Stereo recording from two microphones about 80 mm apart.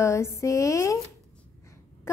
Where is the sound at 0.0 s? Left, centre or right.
Left.